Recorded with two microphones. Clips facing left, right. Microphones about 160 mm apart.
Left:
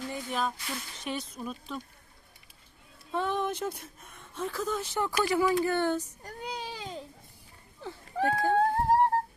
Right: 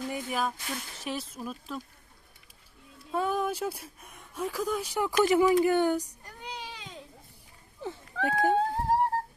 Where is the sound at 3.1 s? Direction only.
5° right (ahead or behind).